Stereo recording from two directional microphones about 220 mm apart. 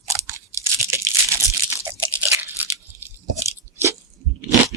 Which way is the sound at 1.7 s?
10° right (ahead or behind).